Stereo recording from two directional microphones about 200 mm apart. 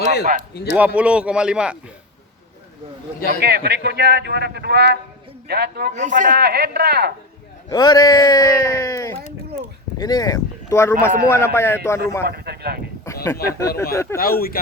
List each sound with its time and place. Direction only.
0.5 s speech: 55° left (ahead or behind)
0.9 s speech: 5° right (ahead or behind)
3.2 s a man's voice: 50° right (ahead or behind)
5.9 s speech: 40° right (ahead or behind); by 7.1 s 55° right (ahead or behind)
7.7 s speech: 20° left (ahead or behind)
12.2 s speech: 50° right (ahead or behind)
13.2 s speech: 15° left (ahead or behind)
14.2 s speech: 50° left (ahead or behind)